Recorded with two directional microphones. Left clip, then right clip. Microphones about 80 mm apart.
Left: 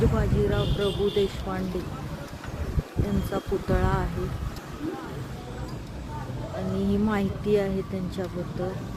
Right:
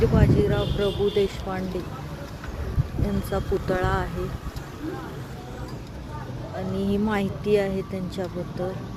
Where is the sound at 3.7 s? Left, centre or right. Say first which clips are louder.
Right 2 dB; centre.